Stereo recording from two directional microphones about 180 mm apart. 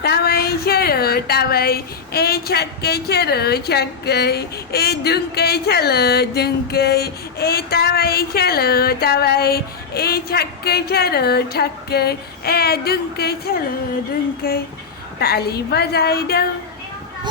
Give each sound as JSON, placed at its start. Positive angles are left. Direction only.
{"t": 0.0, "sound": "speech", "side_deg": 60}